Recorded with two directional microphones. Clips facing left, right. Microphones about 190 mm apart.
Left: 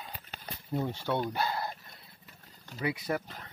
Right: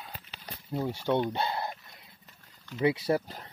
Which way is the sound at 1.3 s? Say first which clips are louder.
Right 1 dB; 25° right (ahead or behind).